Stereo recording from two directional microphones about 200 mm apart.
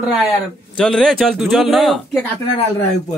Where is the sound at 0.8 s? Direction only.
5° left (ahead or behind).